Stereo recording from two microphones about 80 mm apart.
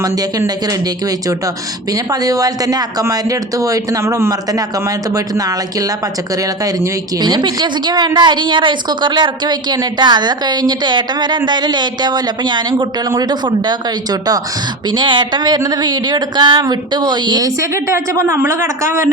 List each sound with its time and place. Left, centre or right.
0.0 s speech: right
1.9 s speech: right
4.0 s a woman's voice: right
5.1 s speech: right
7.2 s a woman's voice: right
14.8 s speech: right
17.6 s a woman's voice: right